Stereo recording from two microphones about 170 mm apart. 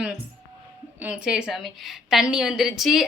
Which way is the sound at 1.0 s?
10° right (ahead or behind).